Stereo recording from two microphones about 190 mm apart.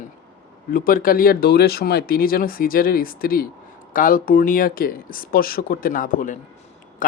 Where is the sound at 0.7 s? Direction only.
50° left (ahead or behind).